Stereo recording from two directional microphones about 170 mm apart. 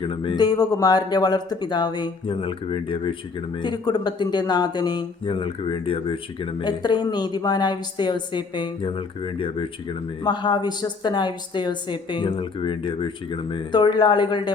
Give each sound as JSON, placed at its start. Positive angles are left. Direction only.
{"t": 0.0, "sound": "speech", "side_deg": 30}